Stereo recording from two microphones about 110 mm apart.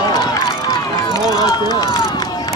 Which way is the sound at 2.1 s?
35° left (ahead or behind).